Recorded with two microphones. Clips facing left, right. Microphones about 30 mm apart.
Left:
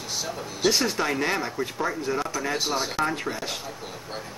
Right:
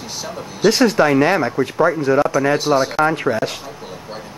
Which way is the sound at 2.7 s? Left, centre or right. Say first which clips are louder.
Right 11 dB; centre.